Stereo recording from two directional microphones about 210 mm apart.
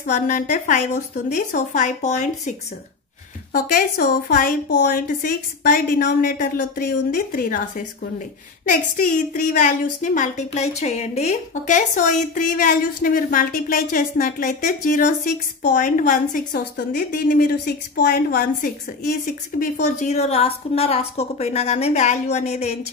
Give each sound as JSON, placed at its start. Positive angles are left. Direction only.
{"t": 0.1, "sound": "a woman's voice", "side_deg": 35}
{"t": 3.5, "sound": "a woman's voice", "side_deg": 40}